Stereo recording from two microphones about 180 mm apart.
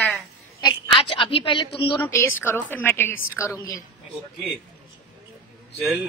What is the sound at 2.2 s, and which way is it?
A woman's voice, 10° left (ahead or behind).